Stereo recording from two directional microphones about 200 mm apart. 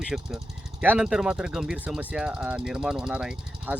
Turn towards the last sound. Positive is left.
turn(degrees=-5)  # may be behind; listen again after turning